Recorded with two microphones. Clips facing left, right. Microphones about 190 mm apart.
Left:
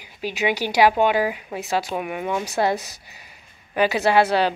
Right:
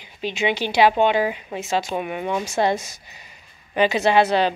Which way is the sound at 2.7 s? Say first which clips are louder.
Right 1 dB; 35° left (ahead or behind).